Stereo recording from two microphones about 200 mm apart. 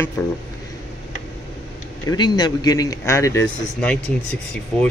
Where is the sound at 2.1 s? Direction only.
20° left (ahead or behind).